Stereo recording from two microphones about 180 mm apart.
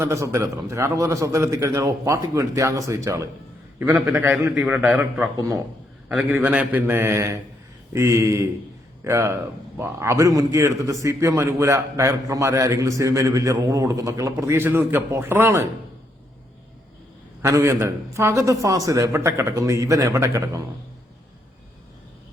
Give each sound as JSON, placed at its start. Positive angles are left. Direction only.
{"t": 0.0, "sound": "a man's voice", "side_deg": -15}
{"t": 6.1, "sound": "a man's voice", "side_deg": -5}
{"t": 17.4, "sound": "a man's voice", "side_deg": -15}